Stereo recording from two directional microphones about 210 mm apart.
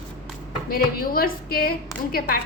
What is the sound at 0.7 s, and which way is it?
A woman's voice, 45° left (ahead or behind).